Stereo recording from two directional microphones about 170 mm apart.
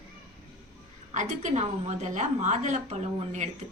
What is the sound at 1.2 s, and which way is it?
A woman's voice, 45° right (ahead or behind).